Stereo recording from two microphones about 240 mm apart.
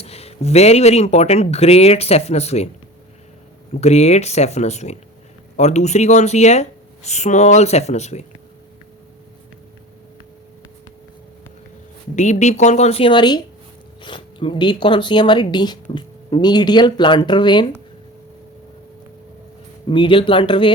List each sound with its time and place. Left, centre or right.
0.0 s speech: left
3.7 s speech: left
12.1 s speech: left
19.9 s speech: centre